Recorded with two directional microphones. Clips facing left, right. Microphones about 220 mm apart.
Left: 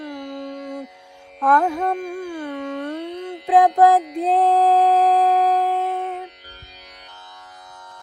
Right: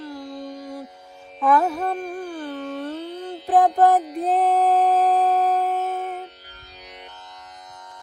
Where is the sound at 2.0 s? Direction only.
10° left (ahead or behind).